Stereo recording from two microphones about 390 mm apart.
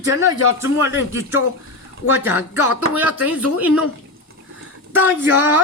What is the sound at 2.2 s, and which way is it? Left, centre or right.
A woman's voice, centre.